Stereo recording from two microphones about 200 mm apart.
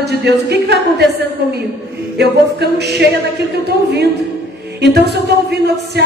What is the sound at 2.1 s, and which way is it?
Speech, 55° right (ahead or behind).